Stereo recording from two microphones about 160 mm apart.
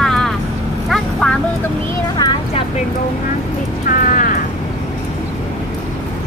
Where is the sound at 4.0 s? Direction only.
60° left (ahead or behind).